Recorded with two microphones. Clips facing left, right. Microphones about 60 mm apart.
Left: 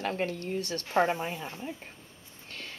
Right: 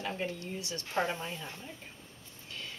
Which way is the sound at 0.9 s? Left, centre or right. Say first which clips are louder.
Left 6 dB; left.